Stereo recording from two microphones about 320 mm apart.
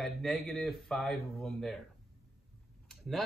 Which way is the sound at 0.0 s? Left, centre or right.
Centre.